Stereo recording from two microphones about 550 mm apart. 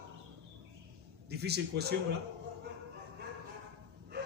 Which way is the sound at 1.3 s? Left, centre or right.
Centre.